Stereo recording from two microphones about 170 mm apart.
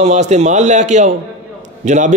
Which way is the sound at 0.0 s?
45° right (ahead or behind).